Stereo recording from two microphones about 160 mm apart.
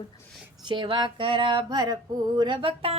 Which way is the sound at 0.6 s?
30° right (ahead or behind).